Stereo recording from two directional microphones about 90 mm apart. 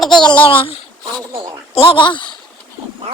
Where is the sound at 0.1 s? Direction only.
55° left (ahead or behind).